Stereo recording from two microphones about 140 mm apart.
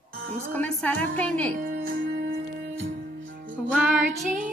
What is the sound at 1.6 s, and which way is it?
Music, 90° right.